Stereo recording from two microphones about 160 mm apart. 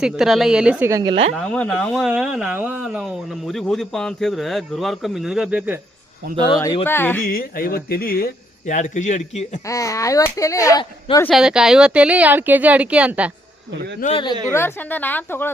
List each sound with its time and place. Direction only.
0.0 s speech: centre (ahead or behind)
0.9 s speech: 20° right (ahead or behind)
1.4 s speech: 5° left (ahead or behind); by 5.8 s 10° right (ahead or behind)
6.5 s a woman's voice: 20° left (ahead or behind)
7.3 s speech: 65° left (ahead or behind)
8.7 s a man's voice: 50° left (ahead or behind)
9.6 s speech: 20° left (ahead or behind)
11.3 s speech: 5° right (ahead or behind)
14.0 s speech: 60° left (ahead or behind)
14.5 s a woman's voice: 15° left (ahead or behind)